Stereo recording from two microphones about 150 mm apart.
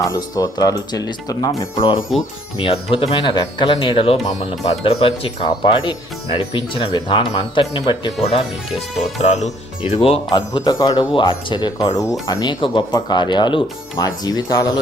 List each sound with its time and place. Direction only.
0.0 s speech: 25° left (ahead or behind)
2.6 s speech: 35° left (ahead or behind)
10.3 s speech: 30° left (ahead or behind)